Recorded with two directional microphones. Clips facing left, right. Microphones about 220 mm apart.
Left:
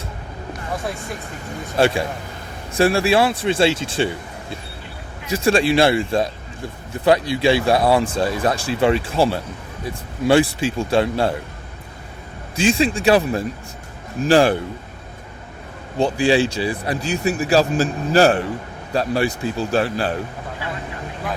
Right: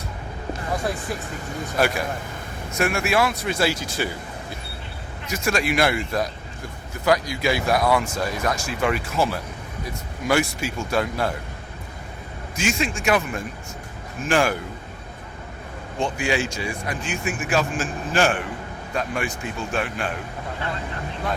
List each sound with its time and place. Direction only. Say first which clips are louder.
1.7 s speech: left 5 dB; 30° left (ahead or behind)
12.5 s speech: left 7 dB; 30° left (ahead or behind)
16.0 s speech: left 7 dB; 35° left (ahead or behind)